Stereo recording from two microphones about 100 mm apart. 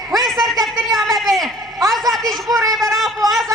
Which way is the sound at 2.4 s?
35° right (ahead or behind).